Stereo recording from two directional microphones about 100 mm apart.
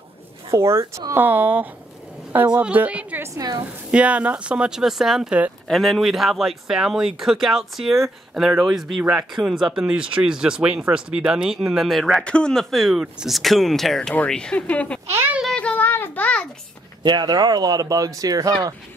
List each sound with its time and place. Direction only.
0.5 s speech: 25° right (ahead or behind)
3.3 s speech: 40° right (ahead or behind)
3.9 s speech: 15° right (ahead or behind); by 15.0 s 10° left (ahead or behind)
15.0 s speech: 25° right (ahead or behind)
15.4 s a sound: 10° left (ahead or behind)
17.0 s speech: 45° right (ahead or behind)